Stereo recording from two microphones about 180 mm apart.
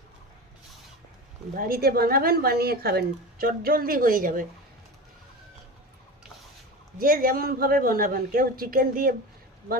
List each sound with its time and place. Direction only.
1.5 s speech: 55° right (ahead or behind)
7.0 s a woman's voice: 50° right (ahead or behind)